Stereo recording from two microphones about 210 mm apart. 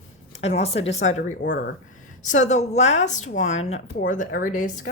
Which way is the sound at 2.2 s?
35° left (ahead or behind).